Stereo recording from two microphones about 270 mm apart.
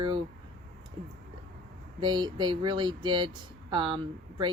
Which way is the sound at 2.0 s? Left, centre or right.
Centre.